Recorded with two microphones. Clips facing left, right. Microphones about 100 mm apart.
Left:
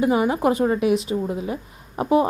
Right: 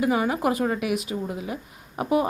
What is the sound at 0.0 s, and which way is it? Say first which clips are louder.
A woman's voice: left 4 dB; 30° left (ahead or behind).